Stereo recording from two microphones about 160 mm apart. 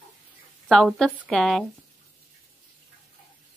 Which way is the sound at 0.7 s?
Centre (ahead or behind).